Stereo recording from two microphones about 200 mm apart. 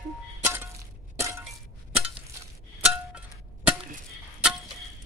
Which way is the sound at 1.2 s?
15° right (ahead or behind).